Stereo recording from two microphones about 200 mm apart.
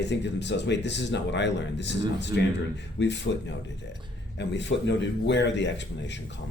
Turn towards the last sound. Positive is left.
turn(degrees=60)  # may be behind; listen again after turning